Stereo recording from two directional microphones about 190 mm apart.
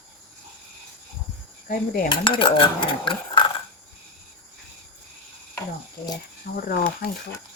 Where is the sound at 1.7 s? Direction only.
50° left (ahead or behind).